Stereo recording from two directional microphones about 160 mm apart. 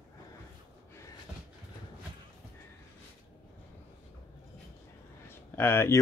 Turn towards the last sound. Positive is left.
turn(degrees=15)  # may be behind; listen again after turning